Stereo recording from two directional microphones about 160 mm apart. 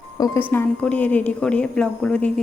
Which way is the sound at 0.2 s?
15° left (ahead or behind).